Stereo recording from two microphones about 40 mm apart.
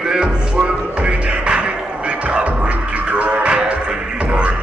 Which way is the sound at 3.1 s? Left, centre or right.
Right.